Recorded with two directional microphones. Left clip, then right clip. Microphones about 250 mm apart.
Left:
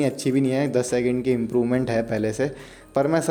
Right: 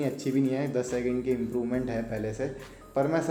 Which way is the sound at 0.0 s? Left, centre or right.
Left.